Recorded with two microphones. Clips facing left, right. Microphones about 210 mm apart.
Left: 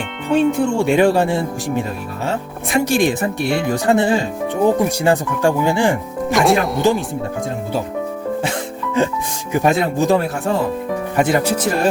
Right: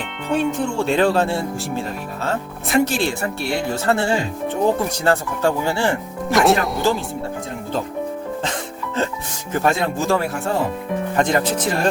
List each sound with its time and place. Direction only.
0.3 s speech: centre (ahead or behind)
0.5 s speech: 15° left (ahead or behind)
6.3 s speech: centre (ahead or behind)
9.0 s speech: 15° left (ahead or behind)